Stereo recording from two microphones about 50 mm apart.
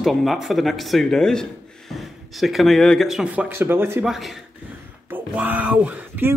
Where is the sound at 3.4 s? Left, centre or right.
Right.